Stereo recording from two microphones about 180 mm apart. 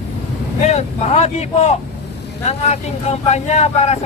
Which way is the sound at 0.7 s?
40° left (ahead or behind).